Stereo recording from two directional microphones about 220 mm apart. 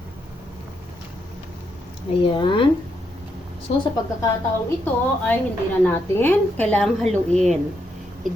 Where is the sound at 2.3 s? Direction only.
20° left (ahead or behind).